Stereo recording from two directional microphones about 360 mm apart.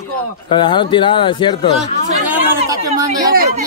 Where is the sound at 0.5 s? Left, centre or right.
Centre.